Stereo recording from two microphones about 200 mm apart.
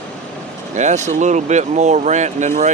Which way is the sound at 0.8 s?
35° right (ahead or behind).